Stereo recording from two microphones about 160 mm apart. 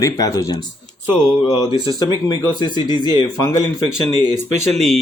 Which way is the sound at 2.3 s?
25° left (ahead or behind).